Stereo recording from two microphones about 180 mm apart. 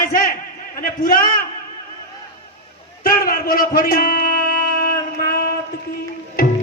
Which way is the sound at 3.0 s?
55° left (ahead or behind).